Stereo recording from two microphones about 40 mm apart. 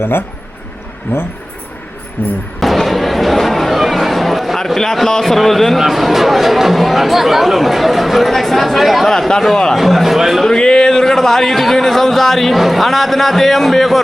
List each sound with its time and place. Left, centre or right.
0.0 s speech: left
2.2 s a sound: left
2.6 s a sound: centre
5.8 s speech: centre
9.0 s speech: centre
10.4 s speech: centre